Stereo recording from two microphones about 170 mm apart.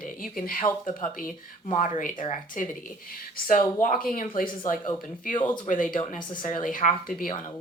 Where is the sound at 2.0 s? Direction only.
50° left (ahead or behind).